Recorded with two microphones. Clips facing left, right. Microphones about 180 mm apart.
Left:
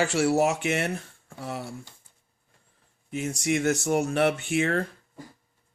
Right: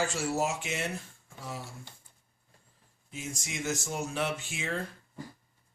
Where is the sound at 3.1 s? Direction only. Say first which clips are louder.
Left 13 dB; 65° left (ahead or behind).